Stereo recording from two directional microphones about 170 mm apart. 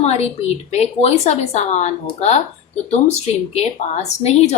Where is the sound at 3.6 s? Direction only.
40° left (ahead or behind).